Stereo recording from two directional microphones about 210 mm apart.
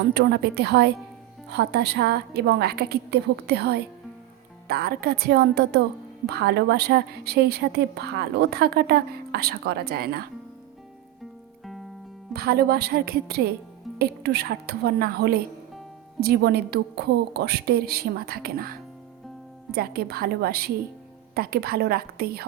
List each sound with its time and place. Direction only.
0.1 s a woman's voice: 50° right (ahead or behind)
12.3 s a woman's voice: 50° right (ahead or behind)